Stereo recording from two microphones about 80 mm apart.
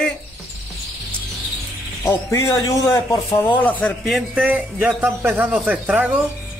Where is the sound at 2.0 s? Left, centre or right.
Left.